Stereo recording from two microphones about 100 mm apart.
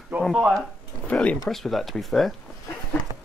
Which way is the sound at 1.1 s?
10° left (ahead or behind).